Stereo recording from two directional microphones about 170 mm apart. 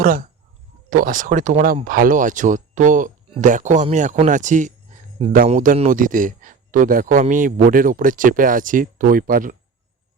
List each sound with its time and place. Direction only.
0.0 s speech: 55° right (ahead or behind)